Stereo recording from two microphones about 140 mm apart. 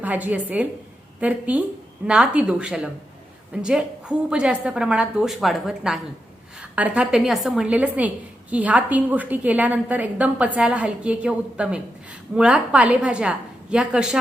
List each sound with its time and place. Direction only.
0.0 s a woman's voice: 10° right (ahead or behind)